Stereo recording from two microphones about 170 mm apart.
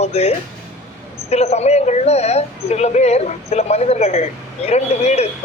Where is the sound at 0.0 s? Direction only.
40° left (ahead or behind).